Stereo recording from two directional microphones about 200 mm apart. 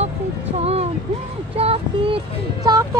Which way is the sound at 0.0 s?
30° right (ahead or behind).